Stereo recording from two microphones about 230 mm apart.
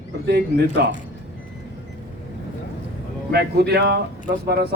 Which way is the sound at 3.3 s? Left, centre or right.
Right.